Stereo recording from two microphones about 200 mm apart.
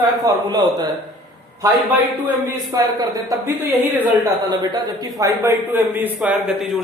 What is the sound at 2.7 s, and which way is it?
A man's voice, 20° right (ahead or behind).